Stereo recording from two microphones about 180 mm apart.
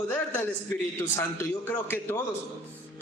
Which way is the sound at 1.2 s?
15° left (ahead or behind).